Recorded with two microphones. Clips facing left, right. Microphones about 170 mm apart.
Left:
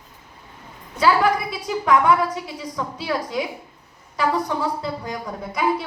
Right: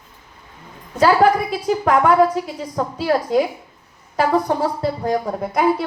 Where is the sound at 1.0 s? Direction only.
45° right (ahead or behind).